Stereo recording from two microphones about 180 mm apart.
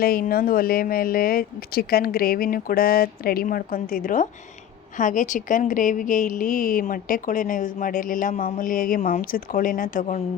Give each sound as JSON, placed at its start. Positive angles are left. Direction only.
{"t": 0.0, "sound": "a woman's voice", "side_deg": 55}